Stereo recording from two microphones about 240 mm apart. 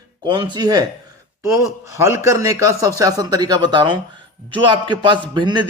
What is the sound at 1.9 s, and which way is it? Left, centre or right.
A man's voice, centre.